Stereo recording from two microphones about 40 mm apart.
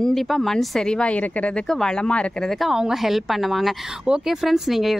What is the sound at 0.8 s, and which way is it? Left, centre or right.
A woman's voice, left.